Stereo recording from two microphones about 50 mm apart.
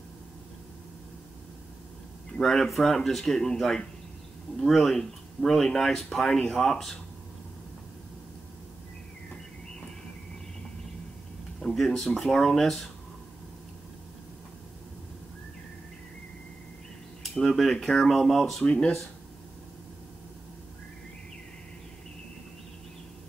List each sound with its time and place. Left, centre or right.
2.3 s speech: centre
11.6 s speech: centre
17.5 s speech: centre